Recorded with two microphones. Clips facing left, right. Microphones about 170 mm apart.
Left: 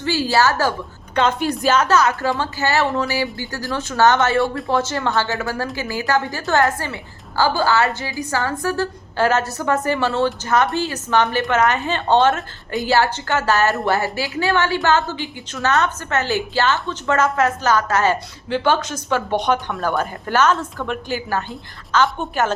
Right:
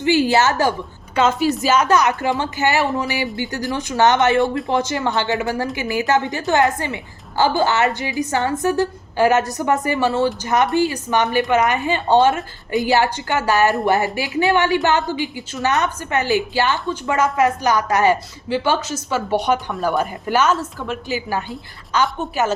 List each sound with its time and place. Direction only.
0.0 s speech: 20° right (ahead or behind)
1.1 s a woman's voice: 5° right (ahead or behind)
22.2 s a woman's voice: 10° right (ahead or behind)